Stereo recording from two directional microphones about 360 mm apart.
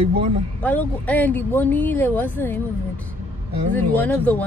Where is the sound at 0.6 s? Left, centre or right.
Centre.